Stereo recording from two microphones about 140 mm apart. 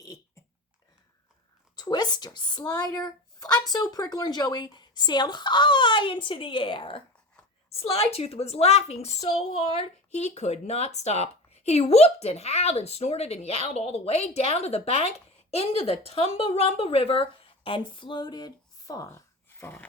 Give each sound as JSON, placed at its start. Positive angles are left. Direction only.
{"t": 1.7, "sound": "speech", "side_deg": 30}
{"t": 9.2, "sound": "speech", "side_deg": 30}
{"t": 9.7, "sound": "speech", "side_deg": 55}